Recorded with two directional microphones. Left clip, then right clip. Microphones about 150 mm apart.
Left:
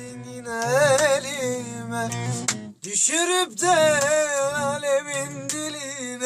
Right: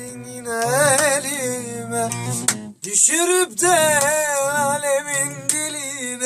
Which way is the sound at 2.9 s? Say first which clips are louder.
Right 4 dB; centre (ahead or behind).